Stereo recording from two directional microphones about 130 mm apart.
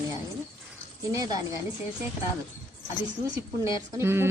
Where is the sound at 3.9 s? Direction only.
20° right (ahead or behind).